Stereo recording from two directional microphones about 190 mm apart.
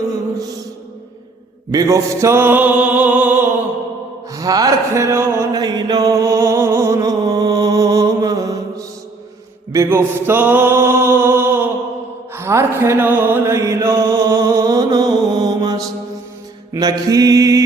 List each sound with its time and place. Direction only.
1.7 s mantra: 15° right (ahead or behind)
4.3 s a sound: 20° right (ahead or behind)
9.7 s music: 10° right (ahead or behind)
12.3 s mantra: 15° right (ahead or behind)
17.1 s mantra: 20° right (ahead or behind)